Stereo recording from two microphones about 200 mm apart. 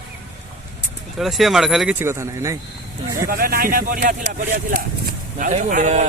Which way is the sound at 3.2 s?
45° right (ahead or behind).